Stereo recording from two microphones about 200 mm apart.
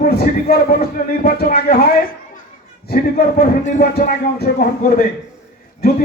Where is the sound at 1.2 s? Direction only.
50° left (ahead or behind).